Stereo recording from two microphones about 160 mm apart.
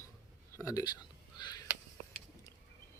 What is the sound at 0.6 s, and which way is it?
Speech, 20° left (ahead or behind).